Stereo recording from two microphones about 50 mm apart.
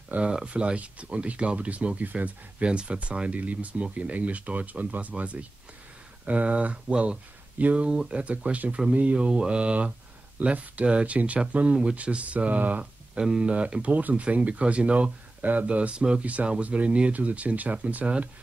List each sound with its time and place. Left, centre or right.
0.3 s speech: centre
13.1 s speech: centre